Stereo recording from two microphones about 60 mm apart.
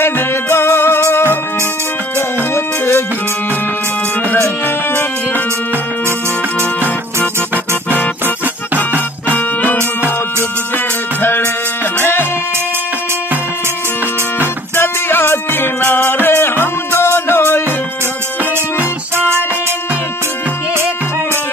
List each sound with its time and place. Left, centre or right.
0.0 s music: left
4.4 s music: left
6.8 s music: right
9.3 s music: left
11.1 s music: left
14.8 s music: left
19.1 s music: right